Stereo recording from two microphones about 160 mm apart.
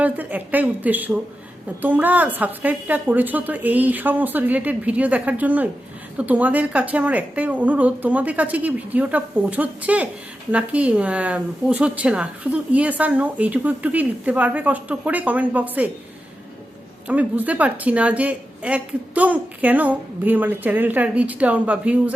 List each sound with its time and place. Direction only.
0.0 s a woman's voice: 10° right (ahead or behind)
17.1 s a woman's voice: 10° right (ahead or behind)